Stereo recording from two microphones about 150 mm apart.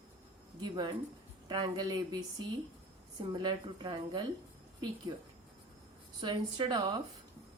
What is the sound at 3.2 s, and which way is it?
A woman's voice, 30° right (ahead or behind).